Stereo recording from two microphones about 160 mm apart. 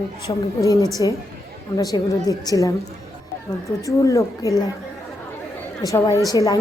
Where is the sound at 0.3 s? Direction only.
25° left (ahead or behind).